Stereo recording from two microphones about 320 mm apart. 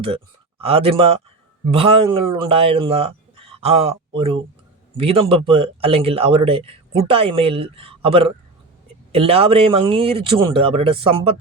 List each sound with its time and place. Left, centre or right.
0.6 s a man's voice: centre